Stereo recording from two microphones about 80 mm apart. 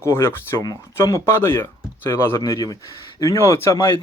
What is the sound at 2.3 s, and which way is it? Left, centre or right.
Speech, left.